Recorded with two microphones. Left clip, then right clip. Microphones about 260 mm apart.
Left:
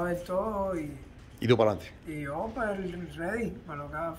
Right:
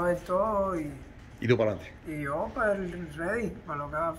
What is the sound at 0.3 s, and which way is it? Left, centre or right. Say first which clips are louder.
Speech: right 2 dB; centre.